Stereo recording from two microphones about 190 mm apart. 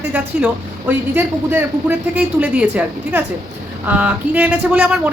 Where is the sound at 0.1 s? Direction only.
5° right (ahead or behind).